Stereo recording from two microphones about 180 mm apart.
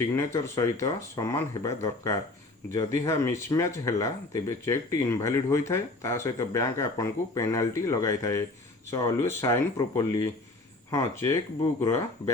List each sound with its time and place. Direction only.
0.2 s speech: 15° left (ahead or behind)